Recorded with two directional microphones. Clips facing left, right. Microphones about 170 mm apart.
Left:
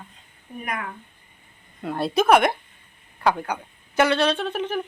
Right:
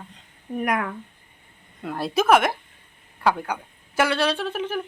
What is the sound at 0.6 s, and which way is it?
Speech, 85° right.